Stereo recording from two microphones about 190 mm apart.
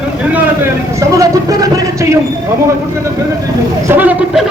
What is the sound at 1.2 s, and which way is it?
Vehicle, 20° right (ahead or behind).